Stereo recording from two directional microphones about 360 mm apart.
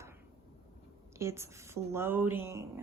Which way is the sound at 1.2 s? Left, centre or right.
Centre.